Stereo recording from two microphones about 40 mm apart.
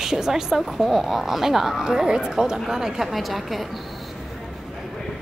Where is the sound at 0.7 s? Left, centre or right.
Centre.